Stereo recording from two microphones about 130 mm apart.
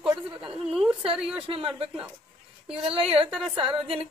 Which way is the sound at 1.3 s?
45° right (ahead or behind).